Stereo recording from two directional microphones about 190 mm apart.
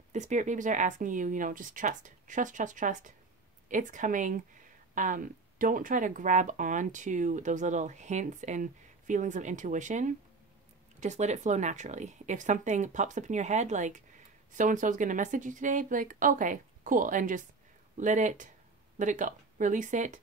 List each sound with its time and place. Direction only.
0.1 s a woman's voice: 40° right (ahead or behind)